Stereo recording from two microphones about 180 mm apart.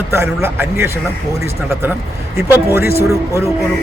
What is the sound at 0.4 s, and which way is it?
Speech, 15° right (ahead or behind).